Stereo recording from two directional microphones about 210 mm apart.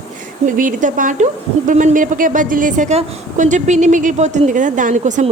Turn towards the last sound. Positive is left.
turn(degrees=-35)  # may be behind; listen again after turning